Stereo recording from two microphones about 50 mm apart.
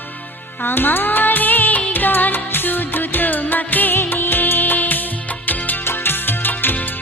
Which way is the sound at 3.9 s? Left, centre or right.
Left.